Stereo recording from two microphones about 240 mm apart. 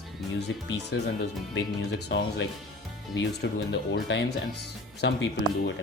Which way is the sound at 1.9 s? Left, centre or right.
Left.